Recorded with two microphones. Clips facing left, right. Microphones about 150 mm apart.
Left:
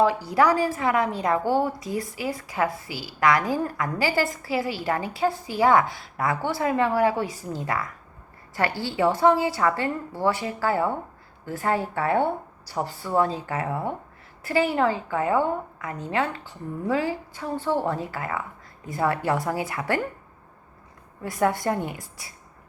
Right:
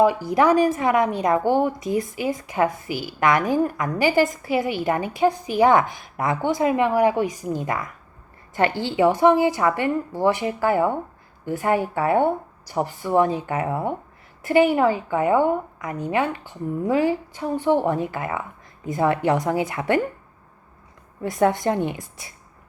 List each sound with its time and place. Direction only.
0.0 s a woman's voice: 20° right (ahead or behind)
21.2 s a woman's voice: 25° right (ahead or behind)